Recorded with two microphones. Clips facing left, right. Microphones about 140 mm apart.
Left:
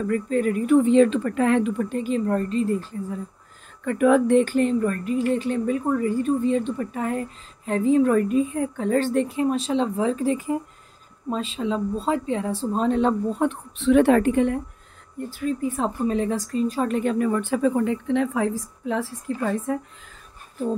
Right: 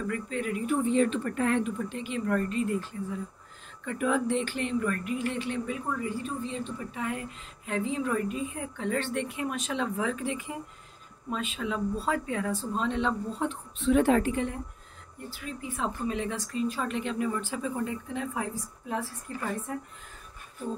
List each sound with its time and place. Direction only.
0.0 s a woman's voice: 40° left (ahead or behind)
0.7 s speech: 90° left
1.9 s speech: 40° left (ahead or behind)
3.8 s speech: 60° left (ahead or behind); by 12.6 s 25° left (ahead or behind)
12.7 s speech: 40° left (ahead or behind); by 14.6 s 60° left (ahead or behind)
15.2 s a woman's voice: 45° left (ahead or behind); by 19.8 s 90° left